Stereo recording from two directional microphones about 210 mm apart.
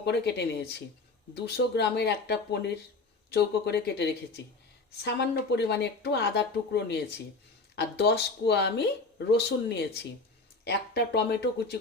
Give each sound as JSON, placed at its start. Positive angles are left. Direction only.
{"t": 0.0, "sound": "speech", "side_deg": 50}
{"t": 7.8, "sound": "speech", "side_deg": 50}